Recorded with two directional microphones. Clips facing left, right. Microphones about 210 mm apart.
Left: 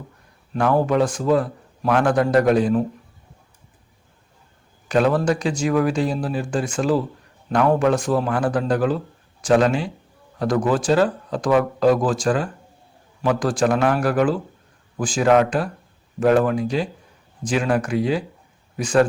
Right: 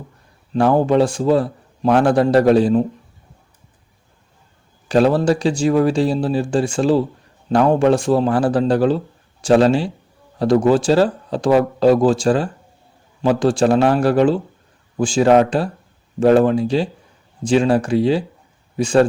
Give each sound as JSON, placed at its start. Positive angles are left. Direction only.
{"t": 0.5, "sound": "a man's voice", "side_deg": -30}
{"t": 4.9, "sound": "a man's voice", "side_deg": -30}